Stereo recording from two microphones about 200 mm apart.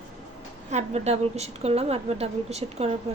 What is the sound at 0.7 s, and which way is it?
A woman's voice, 35° right (ahead or behind).